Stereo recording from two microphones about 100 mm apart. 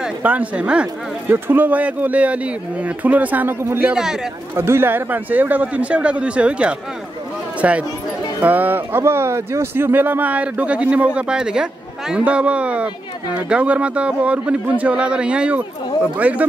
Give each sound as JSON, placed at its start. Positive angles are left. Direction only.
{"t": 0.2, "sound": "speech", "side_deg": -15}
{"t": 3.9, "sound": "a man's voice", "side_deg": -5}
{"t": 4.6, "sound": "speech", "side_deg": -25}